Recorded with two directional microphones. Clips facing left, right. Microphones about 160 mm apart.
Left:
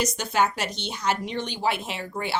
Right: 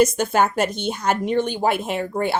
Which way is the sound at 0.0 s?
50° right (ahead or behind).